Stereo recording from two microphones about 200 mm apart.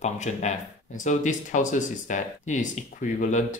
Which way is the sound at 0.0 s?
35° left (ahead or behind).